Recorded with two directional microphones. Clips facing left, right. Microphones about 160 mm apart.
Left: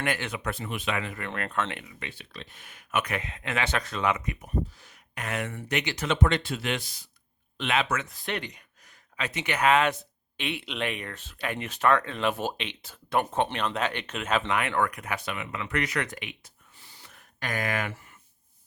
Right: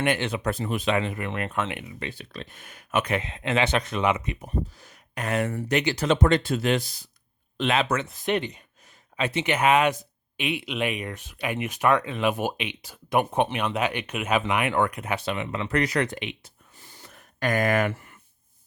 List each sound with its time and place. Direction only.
0.0 s speech: 25° right (ahead or behind)
1.3 s speech: 10° right (ahead or behind)
1.8 s speech: 35° right (ahead or behind)
8.1 s speech: 20° right (ahead or behind)
16.7 s a sound: 45° right (ahead or behind)